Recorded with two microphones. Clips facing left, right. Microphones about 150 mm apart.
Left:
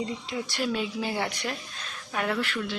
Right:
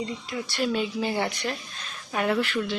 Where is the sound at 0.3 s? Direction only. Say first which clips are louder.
Even; 15° left (ahead or behind).